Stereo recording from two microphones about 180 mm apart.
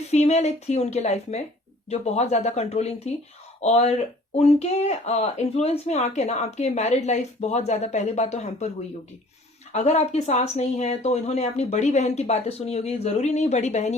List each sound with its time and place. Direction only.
0.1 s speech: 40° left (ahead or behind)
9.7 s speech: 40° left (ahead or behind)